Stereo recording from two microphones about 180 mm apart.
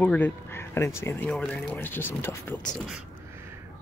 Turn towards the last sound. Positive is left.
turn(degrees=0)  # may be behind; listen again after turning